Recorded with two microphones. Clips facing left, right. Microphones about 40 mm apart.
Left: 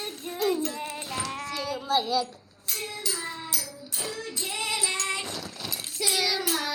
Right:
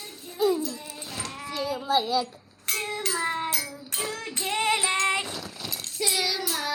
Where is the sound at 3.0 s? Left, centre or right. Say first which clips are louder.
Right 6 dB; right.